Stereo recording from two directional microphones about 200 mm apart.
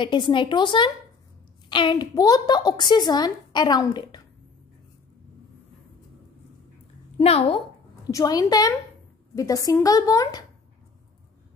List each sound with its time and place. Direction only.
0.0 s a woman's voice: 25° left (ahead or behind)
7.2 s a woman's voice: 30° left (ahead or behind)
8.1 s a woman's voice: 15° left (ahead or behind)